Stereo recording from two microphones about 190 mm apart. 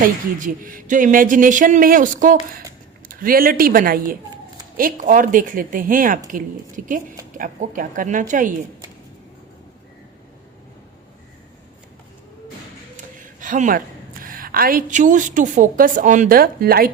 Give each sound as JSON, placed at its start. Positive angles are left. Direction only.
{"t": 0.0, "sound": "speech", "side_deg": -45}
{"t": 13.0, "sound": "a woman's voice", "side_deg": -45}